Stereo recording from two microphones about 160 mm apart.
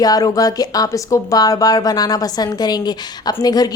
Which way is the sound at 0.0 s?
20° left (ahead or behind).